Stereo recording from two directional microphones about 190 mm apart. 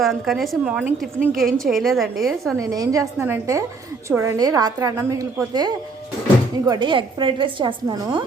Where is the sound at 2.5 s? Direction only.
20° right (ahead or behind).